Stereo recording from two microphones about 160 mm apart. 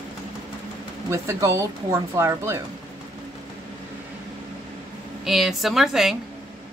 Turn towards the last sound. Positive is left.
turn(degrees=0)  # may be behind; listen again after turning